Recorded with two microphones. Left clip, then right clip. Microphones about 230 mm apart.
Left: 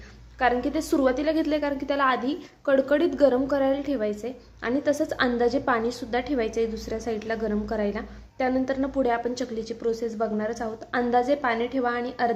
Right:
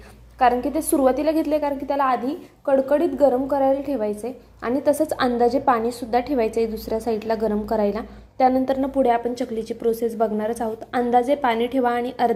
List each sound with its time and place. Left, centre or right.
0.3 s a woman's voice: centre